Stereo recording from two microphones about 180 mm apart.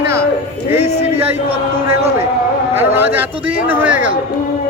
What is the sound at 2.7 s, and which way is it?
A man's voice, 10° right (ahead or behind).